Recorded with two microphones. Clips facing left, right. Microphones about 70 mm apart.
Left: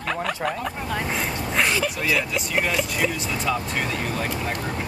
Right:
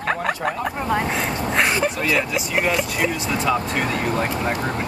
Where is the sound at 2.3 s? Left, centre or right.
Centre.